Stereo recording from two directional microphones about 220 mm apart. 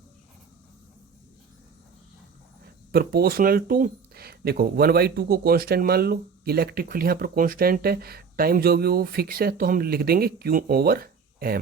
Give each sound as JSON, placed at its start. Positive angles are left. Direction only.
{"t": 2.9, "sound": "speech", "side_deg": -45}